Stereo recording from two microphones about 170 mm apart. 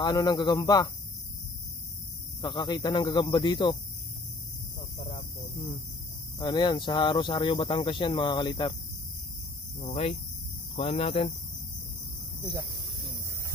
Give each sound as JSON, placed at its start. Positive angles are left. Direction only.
{"t": 0.0, "sound": "speech", "side_deg": 20}
{"t": 2.4, "sound": "speech", "side_deg": 25}
{"t": 4.9, "sound": "cricket", "side_deg": 45}
{"t": 6.3, "sound": "speech", "side_deg": 25}
{"t": 9.8, "sound": "speech", "side_deg": 35}